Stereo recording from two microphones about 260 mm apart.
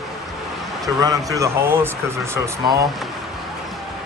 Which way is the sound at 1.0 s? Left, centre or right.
Centre.